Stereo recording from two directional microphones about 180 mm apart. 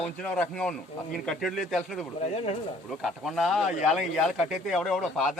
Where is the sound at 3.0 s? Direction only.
Centre (ahead or behind).